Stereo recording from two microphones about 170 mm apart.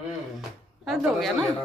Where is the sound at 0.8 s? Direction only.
Centre (ahead or behind).